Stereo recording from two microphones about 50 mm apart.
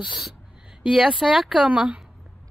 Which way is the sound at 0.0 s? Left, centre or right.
Centre.